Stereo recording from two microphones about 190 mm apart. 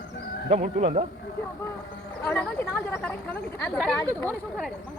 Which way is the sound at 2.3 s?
5° left (ahead or behind).